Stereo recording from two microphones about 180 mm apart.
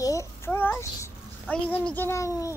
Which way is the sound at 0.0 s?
15° left (ahead or behind).